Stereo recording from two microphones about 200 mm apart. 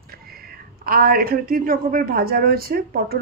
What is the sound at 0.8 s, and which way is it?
A woman's voice, 50° right (ahead or behind).